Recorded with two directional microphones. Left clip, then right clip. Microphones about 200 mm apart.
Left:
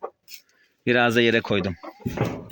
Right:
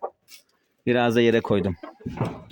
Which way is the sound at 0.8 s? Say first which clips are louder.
Left 1 dB; 10° right (ahead or behind).